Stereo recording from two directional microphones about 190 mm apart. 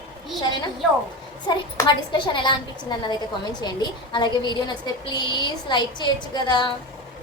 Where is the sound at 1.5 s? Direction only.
20° left (ahead or behind).